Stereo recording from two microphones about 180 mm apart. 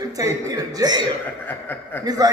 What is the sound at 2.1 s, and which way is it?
Speech, 20° right (ahead or behind).